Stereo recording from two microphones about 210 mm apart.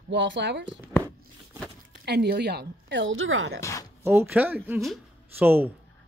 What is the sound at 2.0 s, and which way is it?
Speech, 50° right (ahead or behind).